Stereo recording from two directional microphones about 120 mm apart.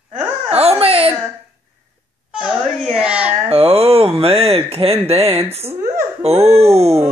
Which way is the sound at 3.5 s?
55° right (ahead or behind).